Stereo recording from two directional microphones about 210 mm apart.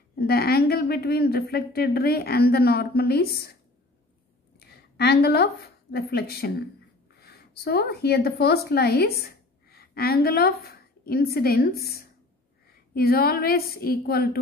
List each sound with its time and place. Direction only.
0.3 s a woman's voice: 45° left (ahead or behind)
4.6 s a woman's voice: 50° left (ahead or behind)